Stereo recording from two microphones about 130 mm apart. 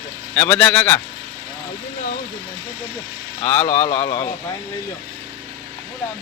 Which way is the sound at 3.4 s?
20° left (ahead or behind).